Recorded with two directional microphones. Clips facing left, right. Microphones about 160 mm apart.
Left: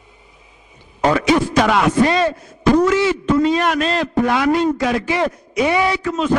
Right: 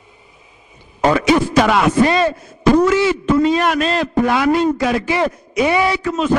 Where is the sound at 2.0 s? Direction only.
10° right (ahead or behind).